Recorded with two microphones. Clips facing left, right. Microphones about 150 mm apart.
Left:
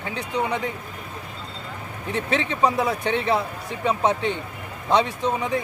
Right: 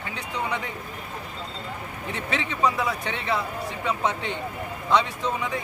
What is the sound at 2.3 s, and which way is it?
Speech, 25° left (ahead or behind).